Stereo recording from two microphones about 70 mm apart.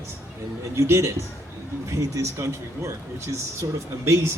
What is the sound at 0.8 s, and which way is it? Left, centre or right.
A man's voice, right.